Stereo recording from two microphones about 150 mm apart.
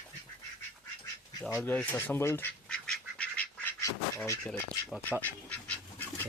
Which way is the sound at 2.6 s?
5° left (ahead or behind).